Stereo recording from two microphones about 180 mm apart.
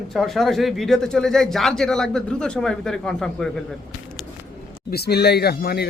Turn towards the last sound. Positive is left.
turn(degrees=60)  # may be behind; listen again after turning